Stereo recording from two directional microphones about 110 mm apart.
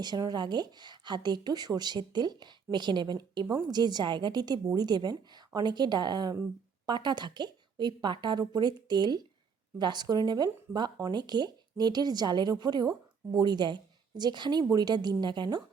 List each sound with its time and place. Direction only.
0.0 s a woman's voice: 40° right (ahead or behind)